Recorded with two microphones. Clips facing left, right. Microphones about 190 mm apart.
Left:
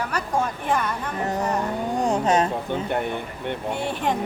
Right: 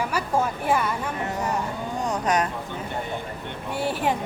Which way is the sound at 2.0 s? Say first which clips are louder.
Left 3 dB; 25° left (ahead or behind).